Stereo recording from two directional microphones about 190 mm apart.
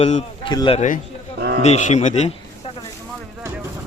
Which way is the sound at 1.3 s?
55° right (ahead or behind).